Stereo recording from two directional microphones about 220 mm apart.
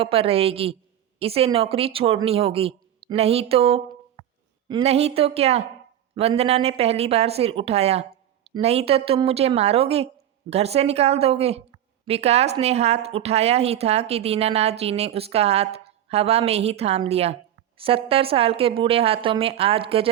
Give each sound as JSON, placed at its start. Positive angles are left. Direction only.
{"t": 0.0, "sound": "speech", "side_deg": -25}